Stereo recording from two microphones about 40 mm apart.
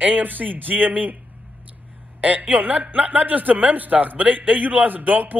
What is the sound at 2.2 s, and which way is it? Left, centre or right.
A woman's voice, right.